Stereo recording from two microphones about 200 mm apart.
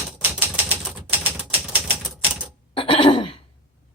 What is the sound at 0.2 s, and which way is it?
Typewriter, 10° right (ahead or behind).